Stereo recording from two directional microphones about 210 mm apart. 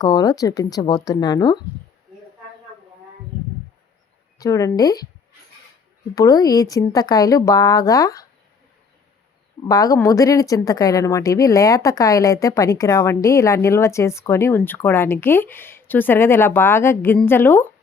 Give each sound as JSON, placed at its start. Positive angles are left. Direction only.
{"t": 0.0, "sound": "speech", "side_deg": 20}
{"t": 4.4, "sound": "speech", "side_deg": 15}
{"t": 6.1, "sound": "speech", "side_deg": 15}
{"t": 9.6, "sound": "speech", "side_deg": 15}